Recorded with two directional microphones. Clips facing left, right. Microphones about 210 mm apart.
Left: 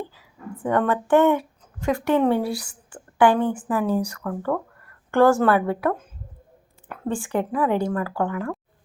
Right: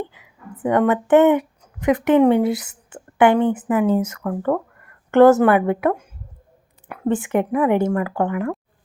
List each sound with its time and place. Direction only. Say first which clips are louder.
0.1 s a woman's voice: left 3 dB; 20° right (ahead or behind)
7.1 s speech: right 5 dB; 20° right (ahead or behind)